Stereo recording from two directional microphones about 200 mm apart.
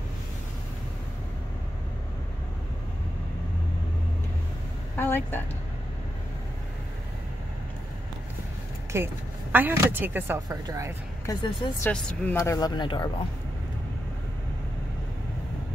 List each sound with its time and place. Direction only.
4.9 s vehicle: 10° left (ahead or behind)
8.9 s speech: 10° right (ahead or behind)
11.2 s speech: 25° left (ahead or behind)
11.8 s speech: 10° left (ahead or behind)